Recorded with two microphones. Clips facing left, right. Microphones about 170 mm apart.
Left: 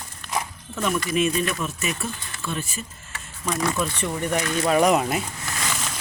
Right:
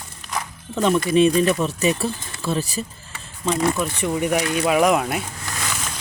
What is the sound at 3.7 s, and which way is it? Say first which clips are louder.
Speech: right 3 dB; 10° right (ahead or behind).